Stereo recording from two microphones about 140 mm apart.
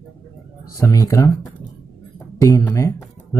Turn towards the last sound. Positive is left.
turn(degrees=20)  # may be behind; listen again after turning